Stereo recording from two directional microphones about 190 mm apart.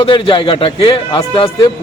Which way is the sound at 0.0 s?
30° left (ahead or behind).